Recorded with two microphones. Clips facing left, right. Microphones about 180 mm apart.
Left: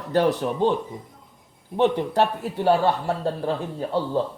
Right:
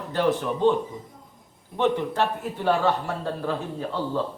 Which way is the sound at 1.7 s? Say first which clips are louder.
Left 3 dB; 35° left (ahead or behind).